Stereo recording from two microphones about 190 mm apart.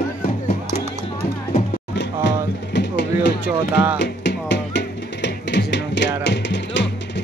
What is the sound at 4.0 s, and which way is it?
Music, 65° left (ahead or behind).